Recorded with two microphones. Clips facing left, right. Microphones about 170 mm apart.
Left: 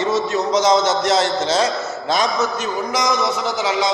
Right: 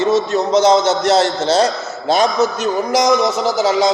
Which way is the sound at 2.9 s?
40° right (ahead or behind).